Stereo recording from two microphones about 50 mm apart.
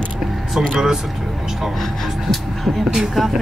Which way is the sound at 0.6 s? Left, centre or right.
Centre.